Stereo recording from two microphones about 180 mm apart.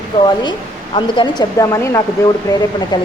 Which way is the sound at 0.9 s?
25° left (ahead or behind).